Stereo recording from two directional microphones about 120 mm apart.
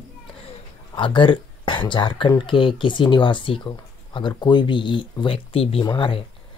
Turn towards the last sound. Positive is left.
turn(degrees=45)  # may be behind; listen again after turning